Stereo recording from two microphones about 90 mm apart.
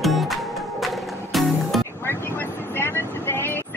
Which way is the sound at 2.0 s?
25° left (ahead or behind).